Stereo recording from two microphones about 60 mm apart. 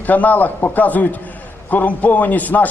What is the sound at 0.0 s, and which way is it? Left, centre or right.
A man's voice, left.